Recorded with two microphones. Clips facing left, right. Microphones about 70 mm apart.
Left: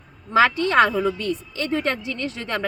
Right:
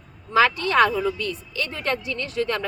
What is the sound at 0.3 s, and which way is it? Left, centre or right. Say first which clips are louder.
Speech: left 1 dB; left.